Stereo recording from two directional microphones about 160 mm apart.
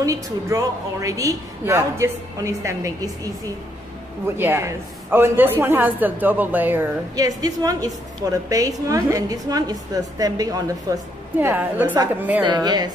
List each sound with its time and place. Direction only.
0.0 s a woman's voice: 20° right (ahead or behind)
4.4 s a man's voice: 15° right (ahead or behind)
11.3 s a man's voice: 10° right (ahead or behind)
12.4 s a woman's voice: 25° right (ahead or behind)